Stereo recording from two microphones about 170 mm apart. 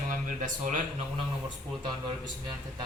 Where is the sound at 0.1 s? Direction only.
50° right (ahead or behind).